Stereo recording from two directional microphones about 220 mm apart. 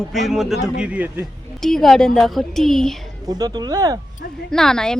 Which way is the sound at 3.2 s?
15° right (ahead or behind).